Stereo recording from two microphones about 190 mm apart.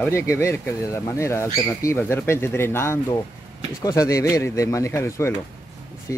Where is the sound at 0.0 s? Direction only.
15° left (ahead or behind).